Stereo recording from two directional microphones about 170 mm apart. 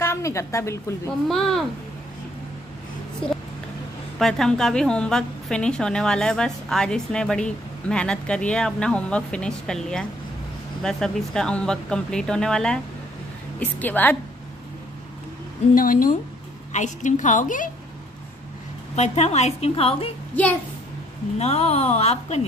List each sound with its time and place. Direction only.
0.0 s a woman's voice: 15° left (ahead or behind)
1.3 s a woman's voice: centre (ahead or behind)
4.2 s a woman's voice: 5° left (ahead or behind)
15.7 s a woman's voice: 55° left (ahead or behind)
18.9 s a woman's voice: 40° left (ahead or behind)
21.4 s a woman's voice: 40° left (ahead or behind)